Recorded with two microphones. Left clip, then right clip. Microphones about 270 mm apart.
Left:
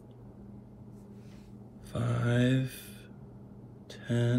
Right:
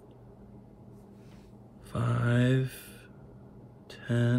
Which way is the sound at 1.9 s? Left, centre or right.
Centre.